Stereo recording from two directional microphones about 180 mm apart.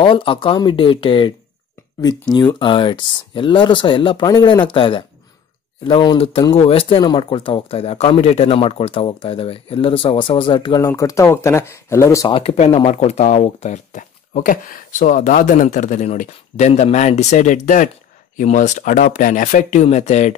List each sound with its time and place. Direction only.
0.0 s speech: 30° left (ahead or behind)
12.3 s speech: 30° left (ahead or behind)